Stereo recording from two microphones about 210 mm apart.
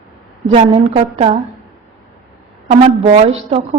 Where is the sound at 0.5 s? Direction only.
30° right (ahead or behind).